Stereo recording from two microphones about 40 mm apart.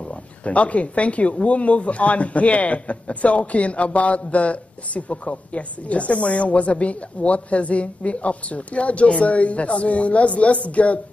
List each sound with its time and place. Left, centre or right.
0.5 s speech: left